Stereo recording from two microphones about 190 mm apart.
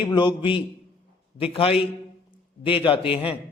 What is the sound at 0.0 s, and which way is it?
A man's voice, 25° left (ahead or behind).